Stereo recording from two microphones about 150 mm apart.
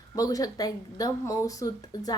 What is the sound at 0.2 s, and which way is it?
A woman's voice, 25° left (ahead or behind).